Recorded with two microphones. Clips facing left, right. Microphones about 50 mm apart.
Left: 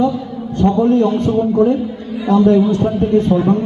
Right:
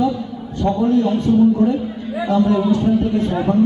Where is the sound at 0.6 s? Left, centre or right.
Left.